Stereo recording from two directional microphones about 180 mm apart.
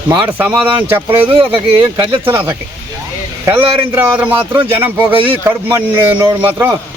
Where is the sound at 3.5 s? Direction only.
30° right (ahead or behind).